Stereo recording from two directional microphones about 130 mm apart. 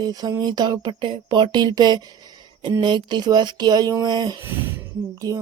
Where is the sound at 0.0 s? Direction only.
30° right (ahead or behind).